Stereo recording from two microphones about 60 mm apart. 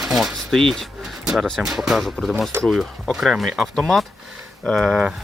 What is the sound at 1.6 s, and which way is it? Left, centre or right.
Speech, centre.